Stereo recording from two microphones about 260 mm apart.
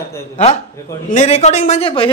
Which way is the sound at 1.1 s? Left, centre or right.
Left.